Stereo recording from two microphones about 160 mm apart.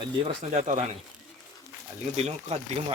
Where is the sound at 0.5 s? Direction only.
50° right (ahead or behind).